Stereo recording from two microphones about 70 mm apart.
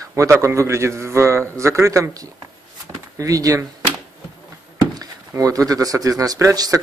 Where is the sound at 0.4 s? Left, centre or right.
Right.